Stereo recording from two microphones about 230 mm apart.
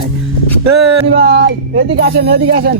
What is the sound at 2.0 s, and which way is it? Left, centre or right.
Speech, right.